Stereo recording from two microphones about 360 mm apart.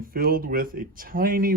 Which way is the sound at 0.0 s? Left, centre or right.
Right.